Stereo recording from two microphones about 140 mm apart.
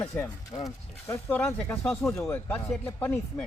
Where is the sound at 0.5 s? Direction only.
30° left (ahead or behind).